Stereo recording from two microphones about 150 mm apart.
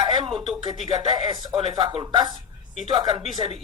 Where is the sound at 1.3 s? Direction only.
30° right (ahead or behind).